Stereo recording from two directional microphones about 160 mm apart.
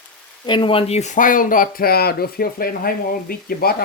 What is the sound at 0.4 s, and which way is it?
Speech, 30° left (ahead or behind).